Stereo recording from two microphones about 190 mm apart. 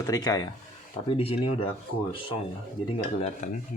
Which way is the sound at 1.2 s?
30° left (ahead or behind).